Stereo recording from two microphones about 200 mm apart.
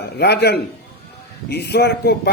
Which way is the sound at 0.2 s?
55° left (ahead or behind).